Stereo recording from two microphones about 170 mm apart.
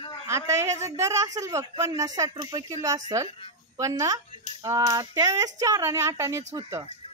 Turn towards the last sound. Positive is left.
turn(degrees=-20)  # may be behind; listen again after turning